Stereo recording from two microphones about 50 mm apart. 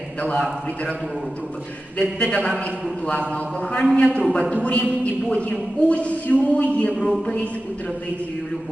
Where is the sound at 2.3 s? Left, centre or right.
Centre.